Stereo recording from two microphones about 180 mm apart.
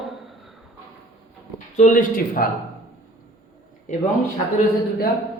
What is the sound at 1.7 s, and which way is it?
Speech, 45° left (ahead or behind).